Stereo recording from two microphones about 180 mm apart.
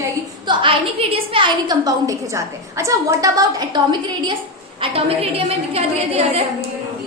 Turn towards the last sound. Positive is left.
turn(degrees=-35)  # may be behind; listen again after turning